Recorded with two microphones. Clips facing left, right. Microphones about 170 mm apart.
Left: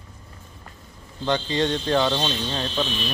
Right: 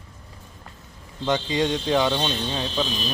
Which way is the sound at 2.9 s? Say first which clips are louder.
Even; 40° right (ahead or behind).